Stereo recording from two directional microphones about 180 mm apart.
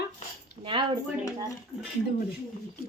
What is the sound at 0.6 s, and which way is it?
Speech, 30° right (ahead or behind).